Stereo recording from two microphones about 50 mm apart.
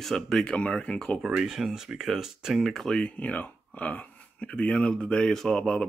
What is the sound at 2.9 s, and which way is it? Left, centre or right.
Speech, left.